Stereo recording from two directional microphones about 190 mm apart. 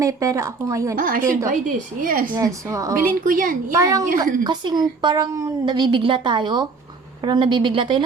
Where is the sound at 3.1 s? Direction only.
45° right (ahead or behind).